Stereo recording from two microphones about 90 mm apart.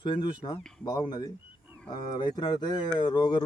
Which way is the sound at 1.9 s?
50° left (ahead or behind).